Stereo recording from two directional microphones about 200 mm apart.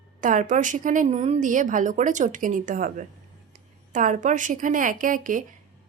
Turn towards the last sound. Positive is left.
turn(degrees=-40)  # may be behind; listen again after turning